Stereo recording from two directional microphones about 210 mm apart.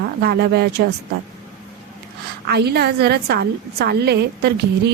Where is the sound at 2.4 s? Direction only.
50° right (ahead or behind).